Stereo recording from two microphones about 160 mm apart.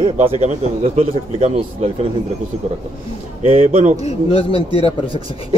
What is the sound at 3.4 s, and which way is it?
Speech, 40° right (ahead or behind).